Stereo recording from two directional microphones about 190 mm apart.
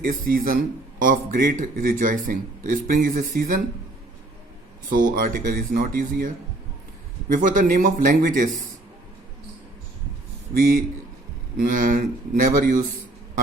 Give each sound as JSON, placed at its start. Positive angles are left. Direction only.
{"t": 0.0, "sound": "a man's voice", "side_deg": -50}
{"t": 4.9, "sound": "a man's voice", "side_deg": -50}
{"t": 7.3, "sound": "a man's voice", "side_deg": -45}
{"t": 10.5, "sound": "a man's voice", "side_deg": -55}